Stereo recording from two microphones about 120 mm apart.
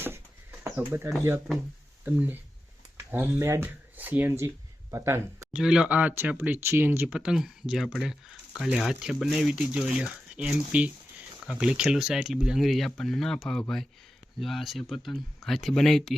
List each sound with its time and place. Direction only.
2.0 s speech: 15° right (ahead or behind)
5.5 s speech: 5° right (ahead or behind)